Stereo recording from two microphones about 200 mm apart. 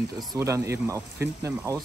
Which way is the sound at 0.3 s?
15° right (ahead or behind).